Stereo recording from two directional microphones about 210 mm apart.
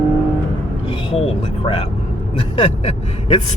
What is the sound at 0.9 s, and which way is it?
Speech, 25° left (ahead or behind).